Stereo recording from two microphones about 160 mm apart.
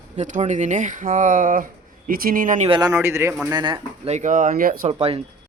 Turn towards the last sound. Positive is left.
turn(degrees=-35)  # may be behind; listen again after turning